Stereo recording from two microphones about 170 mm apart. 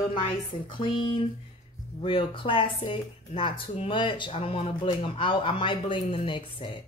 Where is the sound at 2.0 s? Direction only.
30° left (ahead or behind).